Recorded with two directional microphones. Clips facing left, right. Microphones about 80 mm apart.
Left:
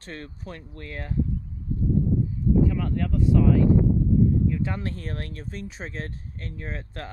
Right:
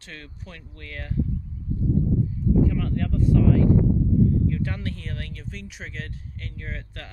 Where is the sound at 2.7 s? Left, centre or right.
Centre.